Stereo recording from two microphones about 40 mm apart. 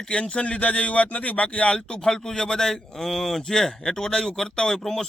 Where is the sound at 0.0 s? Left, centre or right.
Left.